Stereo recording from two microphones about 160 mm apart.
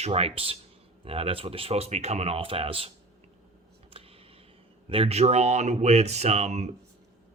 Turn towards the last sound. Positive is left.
turn(degrees=-45)  # may be behind; listen again after turning